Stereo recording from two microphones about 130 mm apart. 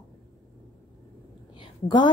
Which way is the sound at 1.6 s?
35° left (ahead or behind).